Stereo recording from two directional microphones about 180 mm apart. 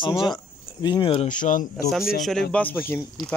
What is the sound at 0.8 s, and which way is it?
Speech, 25° left (ahead or behind).